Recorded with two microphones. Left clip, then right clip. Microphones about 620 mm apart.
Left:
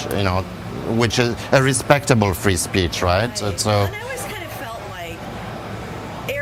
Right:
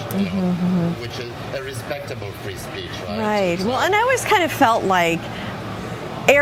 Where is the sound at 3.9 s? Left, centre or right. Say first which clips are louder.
Right 12 dB; right.